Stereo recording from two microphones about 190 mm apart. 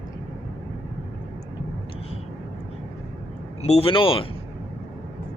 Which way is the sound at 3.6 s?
30° left (ahead or behind).